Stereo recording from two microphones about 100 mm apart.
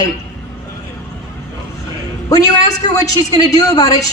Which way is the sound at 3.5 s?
40° left (ahead or behind).